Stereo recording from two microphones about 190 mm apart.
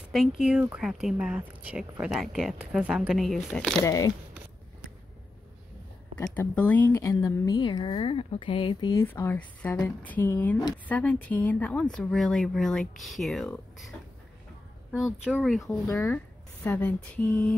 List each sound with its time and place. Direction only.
0.1 s speech: centre (ahead or behind)
3.8 s speech: 20° left (ahead or behind)
6.1 s speech: 10° left (ahead or behind)
9.0 s speech: 10° left (ahead or behind)
15.6 s speech: 10° left (ahead or behind)